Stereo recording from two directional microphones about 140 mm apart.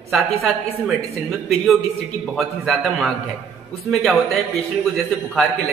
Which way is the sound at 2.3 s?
Centre (ahead or behind).